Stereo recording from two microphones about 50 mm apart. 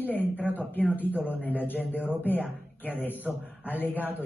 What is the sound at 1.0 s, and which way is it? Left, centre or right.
Speech, right.